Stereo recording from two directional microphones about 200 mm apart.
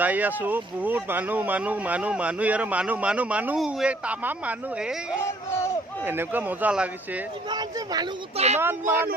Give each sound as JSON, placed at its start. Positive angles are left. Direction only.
{"t": 0.0, "sound": "speech", "side_deg": -10}
{"t": 5.2, "sound": "speech", "side_deg": 15}
{"t": 6.1, "sound": "speech", "side_deg": -10}
{"t": 7.5, "sound": "speech", "side_deg": -20}
{"t": 8.4, "sound": "speech", "side_deg": -35}